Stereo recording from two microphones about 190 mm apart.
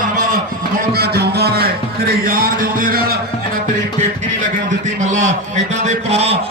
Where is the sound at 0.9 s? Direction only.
55° right (ahead or behind).